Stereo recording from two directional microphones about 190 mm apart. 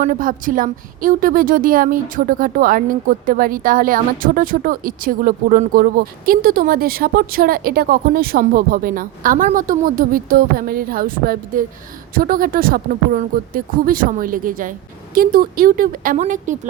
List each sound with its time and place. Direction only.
0.0 s a woman's voice: 45° right (ahead or behind)